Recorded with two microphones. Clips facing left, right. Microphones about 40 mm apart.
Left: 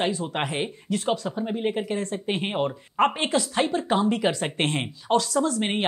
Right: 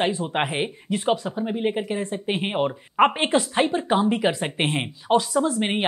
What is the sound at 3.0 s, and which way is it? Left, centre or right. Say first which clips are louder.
Speech: right 3 dB; right.